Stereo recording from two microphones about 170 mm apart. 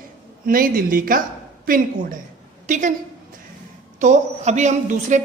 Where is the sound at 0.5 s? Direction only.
55° right (ahead or behind).